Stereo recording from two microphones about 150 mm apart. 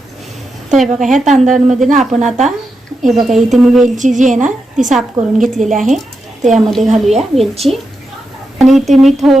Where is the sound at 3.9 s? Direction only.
55° right (ahead or behind).